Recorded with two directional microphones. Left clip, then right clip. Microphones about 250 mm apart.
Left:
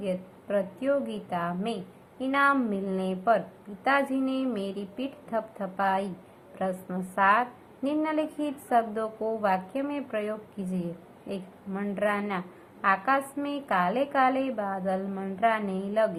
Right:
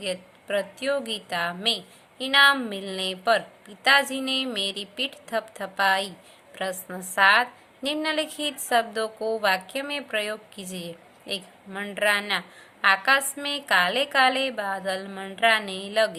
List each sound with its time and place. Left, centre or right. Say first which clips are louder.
0.0 s a woman's voice: right 1 dB; right